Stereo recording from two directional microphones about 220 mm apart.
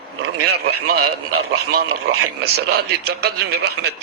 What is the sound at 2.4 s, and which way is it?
A man's voice, 45° right (ahead or behind).